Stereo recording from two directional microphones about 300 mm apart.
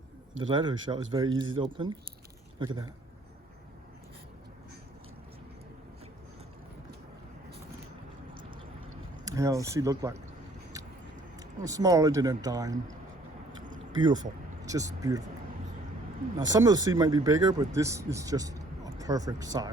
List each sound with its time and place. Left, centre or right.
0.4 s speech: centre
9.2 s speech: centre
11.3 s speech: centre
13.9 s speech: centre
16.4 s speech: centre